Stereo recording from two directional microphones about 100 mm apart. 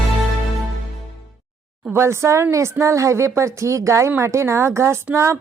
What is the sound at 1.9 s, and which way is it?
Speech, 25° right (ahead or behind).